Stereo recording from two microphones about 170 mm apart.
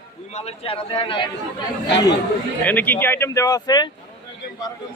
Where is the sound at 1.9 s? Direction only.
90° left.